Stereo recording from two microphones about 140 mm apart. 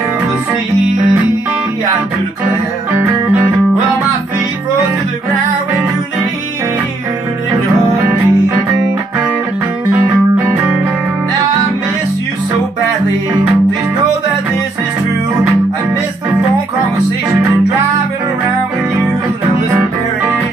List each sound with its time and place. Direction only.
2.9 s music: 15° right (ahead or behind)
8.0 s music: 20° right (ahead or behind)
9.9 s music: 15° right (ahead or behind)
19.7 s music: 20° right (ahead or behind)